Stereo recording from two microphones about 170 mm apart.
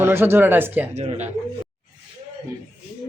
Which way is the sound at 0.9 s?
40° right (ahead or behind).